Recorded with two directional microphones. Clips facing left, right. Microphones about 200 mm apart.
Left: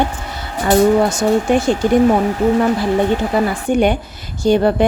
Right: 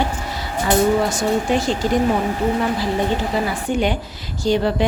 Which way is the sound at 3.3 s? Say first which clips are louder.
Left 5 dB; 60° left (ahead or behind).